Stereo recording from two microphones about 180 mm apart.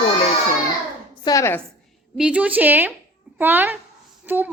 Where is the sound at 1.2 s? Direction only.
15° left (ahead or behind).